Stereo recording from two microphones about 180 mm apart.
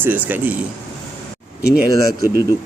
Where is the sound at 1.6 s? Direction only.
10° right (ahead or behind).